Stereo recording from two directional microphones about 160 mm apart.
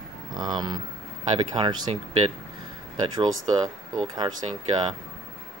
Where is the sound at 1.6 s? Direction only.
35° right (ahead or behind).